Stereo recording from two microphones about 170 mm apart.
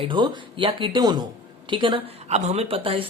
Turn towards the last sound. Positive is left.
turn(degrees=-30)  # may be behind; listen again after turning